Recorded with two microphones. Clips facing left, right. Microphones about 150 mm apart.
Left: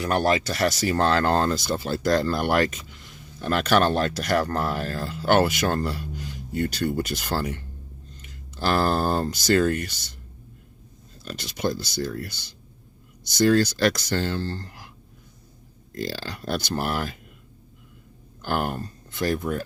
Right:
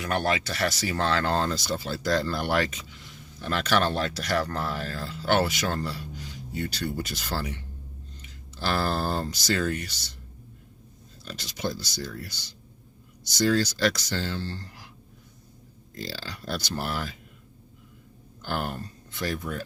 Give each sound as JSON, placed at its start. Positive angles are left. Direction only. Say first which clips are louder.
{"t": 0.0, "sound": "speech", "louder": "left 5 dB", "side_deg": 35}
{"t": 11.3, "sound": "speech", "louder": "left 5 dB", "side_deg": 55}
{"t": 16.0, "sound": "speech", "louder": "left 6 dB", "side_deg": 55}
{"t": 18.4, "sound": "speech", "louder": "left 5 dB", "side_deg": 55}